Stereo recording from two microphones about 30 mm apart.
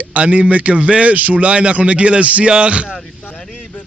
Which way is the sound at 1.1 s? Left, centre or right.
Right.